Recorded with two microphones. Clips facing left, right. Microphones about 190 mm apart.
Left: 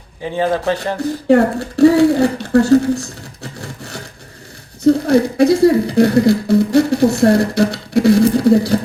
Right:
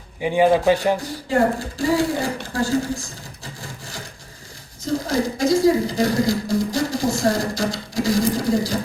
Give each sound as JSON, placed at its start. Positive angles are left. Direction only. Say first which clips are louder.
{"t": 0.2, "sound": "speech", "louder": "right 2 dB", "side_deg": -15}
{"t": 1.3, "sound": "a woman's voice", "louder": "left 7 dB", "side_deg": 65}